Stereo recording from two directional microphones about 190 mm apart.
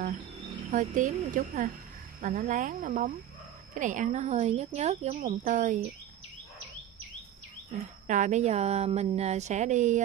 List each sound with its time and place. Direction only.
0.7 s speech: 40° right (ahead or behind)
8.1 s speech: 40° right (ahead or behind)